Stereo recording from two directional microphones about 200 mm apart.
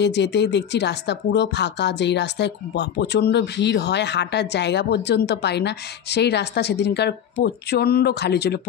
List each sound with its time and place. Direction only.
0.0 s speech: 60° left (ahead or behind)